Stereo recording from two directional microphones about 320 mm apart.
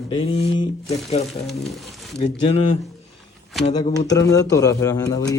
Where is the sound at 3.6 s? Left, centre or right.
Centre.